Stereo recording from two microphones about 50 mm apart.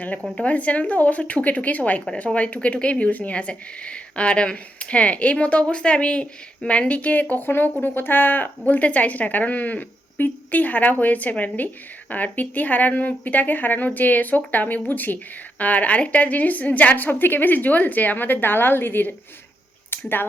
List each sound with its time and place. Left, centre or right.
0.4 s speech: left